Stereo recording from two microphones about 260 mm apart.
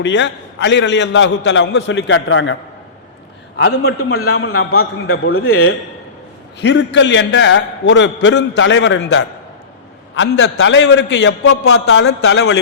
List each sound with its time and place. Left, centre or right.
0.0 s a man's voice: left
3.6 s a man's voice: left